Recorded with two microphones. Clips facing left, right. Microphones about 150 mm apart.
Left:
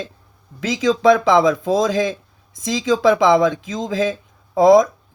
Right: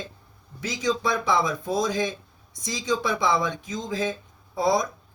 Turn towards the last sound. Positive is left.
turn(degrees=90)